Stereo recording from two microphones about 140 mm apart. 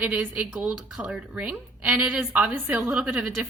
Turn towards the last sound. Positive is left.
turn(degrees=-10)  # may be behind; listen again after turning